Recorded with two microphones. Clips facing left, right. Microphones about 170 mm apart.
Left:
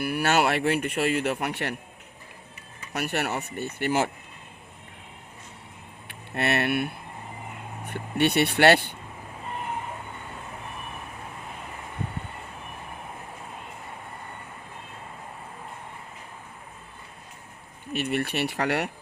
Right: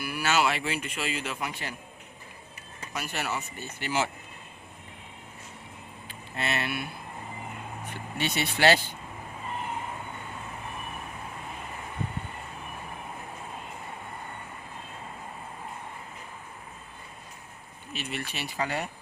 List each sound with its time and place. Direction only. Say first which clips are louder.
0.0 s speech: left 4 dB; 60° left (ahead or behind)
2.9 s speech: left 5 dB; 65° left (ahead or behind)
6.1 s speech: left 6 dB; 65° left (ahead or behind)
17.9 s speech: left 9 dB; 60° left (ahead or behind)